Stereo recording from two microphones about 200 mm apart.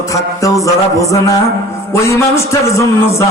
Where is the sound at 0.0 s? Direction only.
15° left (ahead or behind).